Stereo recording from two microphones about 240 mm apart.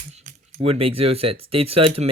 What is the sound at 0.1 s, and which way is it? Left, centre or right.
Speech, right.